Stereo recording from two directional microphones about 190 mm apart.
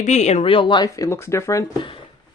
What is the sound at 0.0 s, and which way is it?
Speech, 35° left (ahead or behind).